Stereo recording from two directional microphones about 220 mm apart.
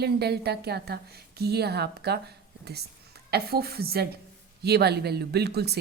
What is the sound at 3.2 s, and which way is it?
A woman's voice, 45° right (ahead or behind).